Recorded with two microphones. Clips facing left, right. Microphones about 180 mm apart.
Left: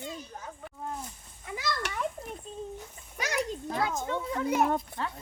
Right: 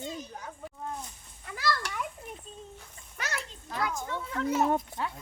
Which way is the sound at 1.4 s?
15° left (ahead or behind).